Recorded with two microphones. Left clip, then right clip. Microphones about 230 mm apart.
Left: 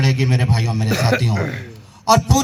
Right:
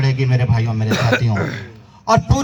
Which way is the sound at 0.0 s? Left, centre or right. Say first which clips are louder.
Left 1 dB; left.